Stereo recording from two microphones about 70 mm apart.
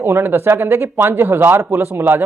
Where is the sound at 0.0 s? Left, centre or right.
Right.